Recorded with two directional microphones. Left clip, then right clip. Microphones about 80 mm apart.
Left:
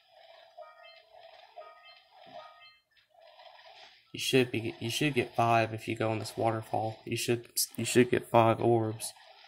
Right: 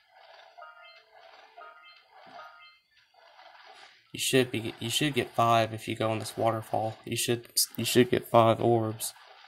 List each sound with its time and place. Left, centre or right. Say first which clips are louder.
2.2 s music: right 1 dB; centre
3.5 s a sound: right 2 dB; centre
4.1 s speech: right 1 dB; right
8.5 s speech: right 2 dB; right